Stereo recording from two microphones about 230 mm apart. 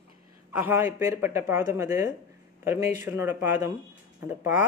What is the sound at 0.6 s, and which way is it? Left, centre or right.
Speech, centre.